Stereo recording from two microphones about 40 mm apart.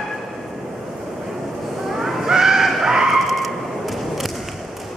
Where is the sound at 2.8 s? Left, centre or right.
Centre.